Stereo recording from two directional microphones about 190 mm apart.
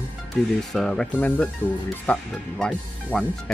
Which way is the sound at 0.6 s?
5° left (ahead or behind).